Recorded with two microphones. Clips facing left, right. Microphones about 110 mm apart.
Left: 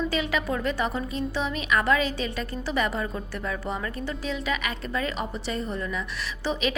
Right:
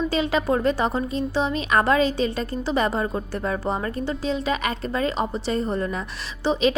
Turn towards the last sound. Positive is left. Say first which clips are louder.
# right 7 dB
turn(degrees=-30)  # may be behind; listen again after turning